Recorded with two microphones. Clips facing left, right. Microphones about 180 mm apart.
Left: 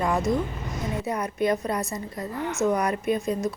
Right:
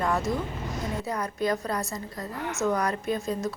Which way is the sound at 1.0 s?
20° left (ahead or behind).